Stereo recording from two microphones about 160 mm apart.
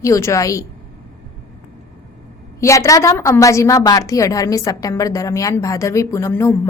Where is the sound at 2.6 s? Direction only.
20° left (ahead or behind).